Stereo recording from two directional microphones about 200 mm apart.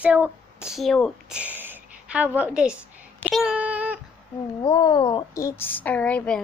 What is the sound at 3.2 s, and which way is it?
Child singing, centre (ahead or behind).